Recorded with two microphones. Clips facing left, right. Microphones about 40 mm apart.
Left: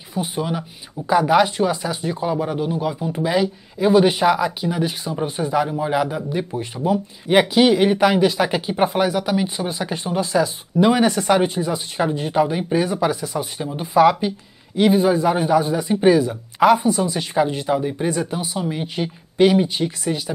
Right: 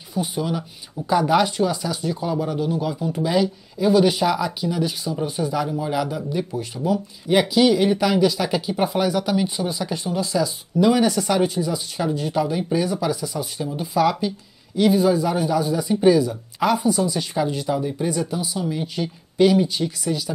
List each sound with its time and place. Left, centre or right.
0.1 s speech: left
9.7 s speech: left